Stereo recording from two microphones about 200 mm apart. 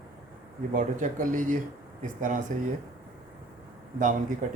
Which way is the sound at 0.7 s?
40° right (ahead or behind).